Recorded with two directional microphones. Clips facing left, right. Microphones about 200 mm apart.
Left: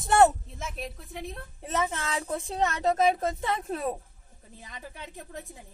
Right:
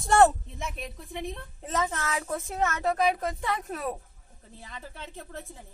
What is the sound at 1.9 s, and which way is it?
Speech, 25° left (ahead or behind).